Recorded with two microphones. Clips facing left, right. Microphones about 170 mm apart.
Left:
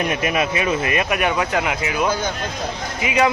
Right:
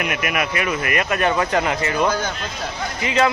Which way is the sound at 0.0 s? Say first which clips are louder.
Left 3 dB; 30° left (ahead or behind).